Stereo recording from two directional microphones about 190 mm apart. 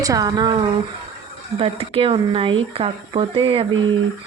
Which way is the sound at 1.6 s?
30° right (ahead or behind).